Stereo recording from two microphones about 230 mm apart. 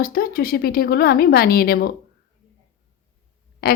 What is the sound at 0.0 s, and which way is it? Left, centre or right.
Speech, left.